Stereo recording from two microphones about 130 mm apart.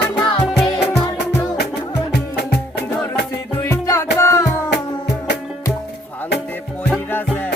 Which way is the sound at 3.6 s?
25° left (ahead or behind).